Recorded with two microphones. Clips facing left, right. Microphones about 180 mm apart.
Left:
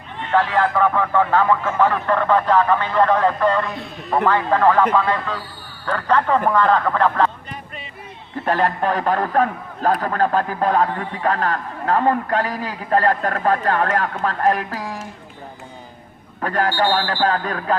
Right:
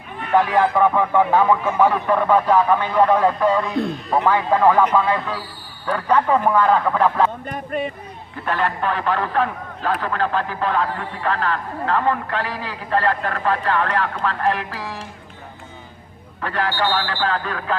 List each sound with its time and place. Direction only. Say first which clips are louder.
0.3 s speech: right 1 dB; 15° right (ahead or behind)
7.4 s speech: right 11 dB; 50° right (ahead or behind)
8.4 s a man's voice: left 3 dB; 40° left (ahead or behind)
16.4 s a man's voice: left 3 dB; 45° left (ahead or behind)